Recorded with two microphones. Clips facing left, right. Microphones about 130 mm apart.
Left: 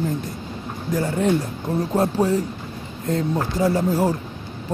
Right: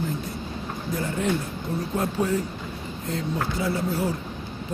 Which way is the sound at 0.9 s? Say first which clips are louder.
Left 6 dB; 40° left (ahead or behind).